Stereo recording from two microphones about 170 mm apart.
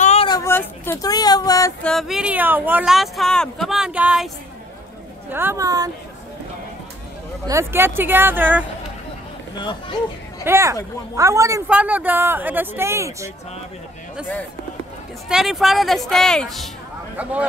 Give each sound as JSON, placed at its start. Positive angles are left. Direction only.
{"t": 0.0, "sound": "a sound", "side_deg": 40}
{"t": 0.3, "sound": "a sound", "side_deg": 15}
{"t": 1.8, "sound": "speech", "side_deg": 5}
{"t": 5.3, "sound": "speech", "side_deg": -15}
{"t": 7.4, "sound": "speech", "side_deg": -15}
{"t": 9.6, "sound": "speech", "side_deg": 25}
{"t": 10.4, "sound": "speech", "side_deg": -15}
{"t": 15.2, "sound": "speech", "side_deg": -5}